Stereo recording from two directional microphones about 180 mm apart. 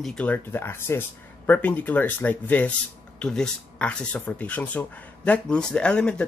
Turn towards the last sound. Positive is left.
turn(degrees=5)  # may be behind; listen again after turning